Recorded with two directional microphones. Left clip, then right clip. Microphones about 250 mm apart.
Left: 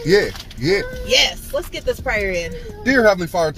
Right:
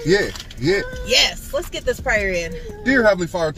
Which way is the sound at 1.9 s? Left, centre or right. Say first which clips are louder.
Right 1 dB; centre.